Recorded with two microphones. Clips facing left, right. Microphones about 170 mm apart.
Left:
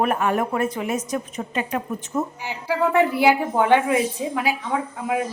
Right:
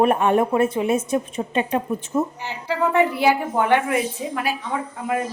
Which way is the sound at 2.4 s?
10° left (ahead or behind).